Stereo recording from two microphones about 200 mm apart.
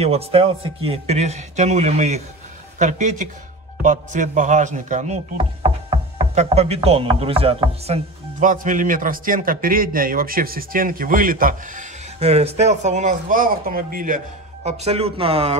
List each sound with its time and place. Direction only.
0.0 s speech: 30° right (ahead or behind)
12.2 s speech: 30° right (ahead or behind)